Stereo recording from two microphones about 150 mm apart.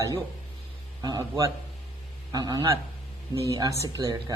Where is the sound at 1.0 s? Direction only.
25° right (ahead or behind).